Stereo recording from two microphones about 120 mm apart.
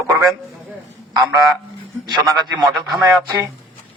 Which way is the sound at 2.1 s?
35° right (ahead or behind).